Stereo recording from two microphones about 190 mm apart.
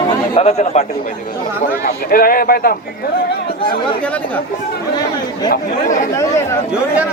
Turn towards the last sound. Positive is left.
turn(degrees=-5)  # may be behind; listen again after turning